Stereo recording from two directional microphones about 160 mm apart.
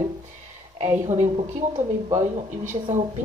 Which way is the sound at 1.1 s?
45° right (ahead or behind).